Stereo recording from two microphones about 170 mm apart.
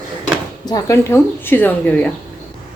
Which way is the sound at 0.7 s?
20° left (ahead or behind).